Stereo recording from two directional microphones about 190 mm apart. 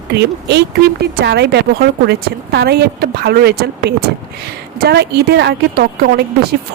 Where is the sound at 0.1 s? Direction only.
60° right (ahead or behind).